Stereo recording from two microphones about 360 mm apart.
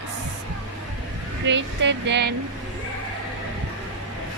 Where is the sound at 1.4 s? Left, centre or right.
Right.